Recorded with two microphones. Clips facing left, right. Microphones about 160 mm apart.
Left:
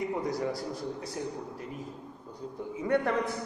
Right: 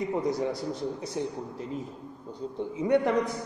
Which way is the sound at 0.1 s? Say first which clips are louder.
Right 3 dB; 20° right (ahead or behind).